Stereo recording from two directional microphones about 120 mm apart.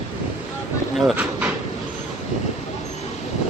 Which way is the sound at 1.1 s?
10° right (ahead or behind).